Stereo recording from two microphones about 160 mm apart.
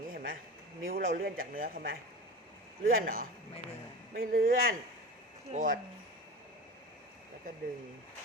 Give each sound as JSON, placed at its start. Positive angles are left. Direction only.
{"t": 0.1, "sound": "a sound", "side_deg": -60}
{"t": 0.8, "sound": "speech", "side_deg": -60}
{"t": 5.5, "sound": "speech", "side_deg": -50}